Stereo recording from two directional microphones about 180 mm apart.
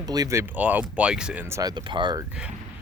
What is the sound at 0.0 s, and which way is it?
Speech, 20° right (ahead or behind).